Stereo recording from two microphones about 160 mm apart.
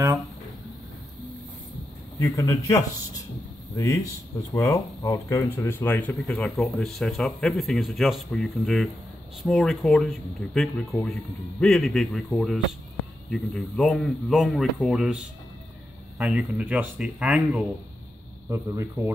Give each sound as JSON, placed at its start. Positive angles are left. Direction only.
{"t": 2.1, "sound": "a man's voice", "side_deg": 20}
{"t": 16.2, "sound": "speech", "side_deg": -10}
{"t": 18.5, "sound": "speech", "side_deg": -15}